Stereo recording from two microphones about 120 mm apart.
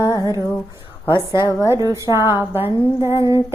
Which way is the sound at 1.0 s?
20° right (ahead or behind).